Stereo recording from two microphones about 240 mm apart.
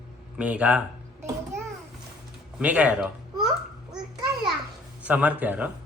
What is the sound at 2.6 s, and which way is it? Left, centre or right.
Speech, centre.